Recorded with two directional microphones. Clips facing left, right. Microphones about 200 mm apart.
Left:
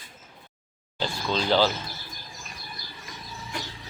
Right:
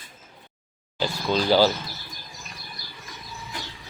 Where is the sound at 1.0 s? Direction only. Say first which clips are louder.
Right 3 dB; 10° right (ahead or behind).